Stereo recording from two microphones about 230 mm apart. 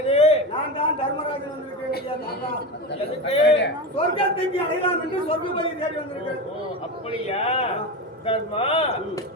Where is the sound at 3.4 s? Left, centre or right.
Left.